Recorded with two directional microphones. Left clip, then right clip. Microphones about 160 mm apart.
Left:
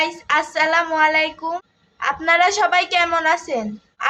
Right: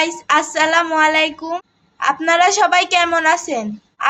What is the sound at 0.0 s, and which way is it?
A woman's voice, 25° right (ahead or behind).